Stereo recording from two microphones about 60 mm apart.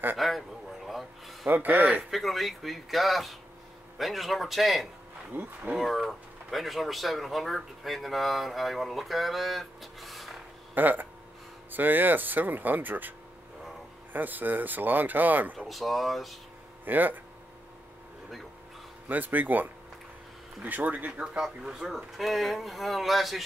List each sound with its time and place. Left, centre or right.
0.2 s a sound: centre
1.5 s speech: right
2.0 s speech: centre
5.3 s speech: right
5.8 s speech: centre
10.7 s speech: right
14.1 s speech: right
15.6 s speech: centre
16.8 s speech: right
19.0 s speech: right
21.2 s speech: centre